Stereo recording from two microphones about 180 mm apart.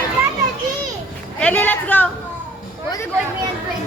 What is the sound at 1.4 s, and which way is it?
Speech, 10° left (ahead or behind).